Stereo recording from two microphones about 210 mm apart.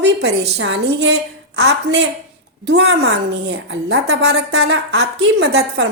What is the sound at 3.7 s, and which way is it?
Speech, 55° right (ahead or behind).